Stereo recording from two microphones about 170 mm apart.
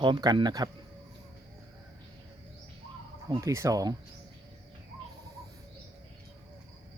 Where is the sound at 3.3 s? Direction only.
20° right (ahead or behind).